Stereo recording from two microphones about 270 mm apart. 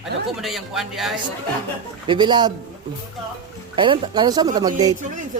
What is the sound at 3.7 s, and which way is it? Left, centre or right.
Speech, centre.